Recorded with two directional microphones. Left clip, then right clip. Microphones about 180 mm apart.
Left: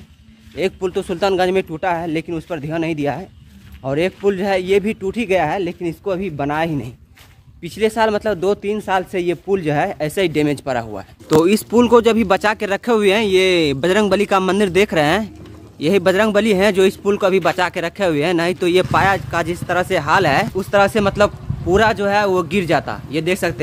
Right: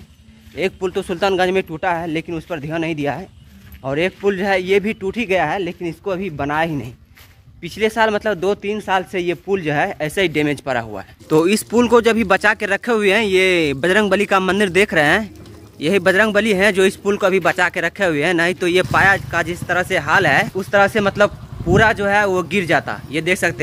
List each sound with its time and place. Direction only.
0.6 s speech: centre (ahead or behind)